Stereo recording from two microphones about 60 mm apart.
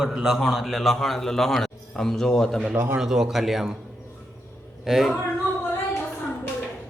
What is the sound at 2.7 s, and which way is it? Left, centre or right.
Speech, right.